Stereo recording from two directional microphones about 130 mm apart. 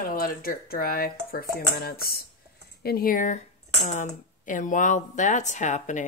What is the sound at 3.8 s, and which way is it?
Speech, 70° left (ahead or behind).